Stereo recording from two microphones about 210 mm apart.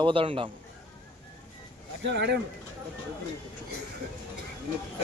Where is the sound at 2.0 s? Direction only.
55° right (ahead or behind).